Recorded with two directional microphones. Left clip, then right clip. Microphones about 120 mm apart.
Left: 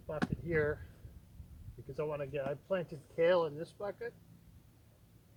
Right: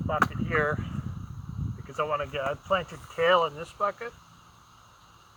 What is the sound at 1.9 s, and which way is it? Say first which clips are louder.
Speech: right 9 dB; 30° left (ahead or behind).